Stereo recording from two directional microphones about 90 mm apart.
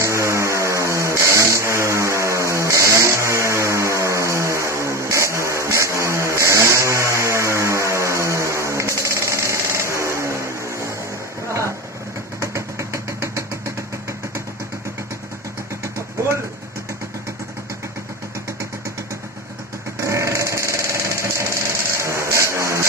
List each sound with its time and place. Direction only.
0.0 s vehicle: 35° right (ahead or behind)
12.4 s engine: 30° right (ahead or behind)
20.0 s sewing machine: 35° right (ahead or behind)
21.9 s vehicle: 30° right (ahead or behind)